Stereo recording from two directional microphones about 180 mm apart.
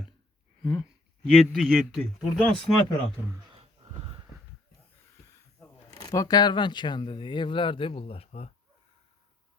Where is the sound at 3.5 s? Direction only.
35° right (ahead or behind).